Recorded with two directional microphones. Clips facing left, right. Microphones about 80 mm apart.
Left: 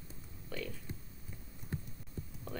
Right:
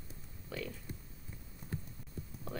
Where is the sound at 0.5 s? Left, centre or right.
Centre.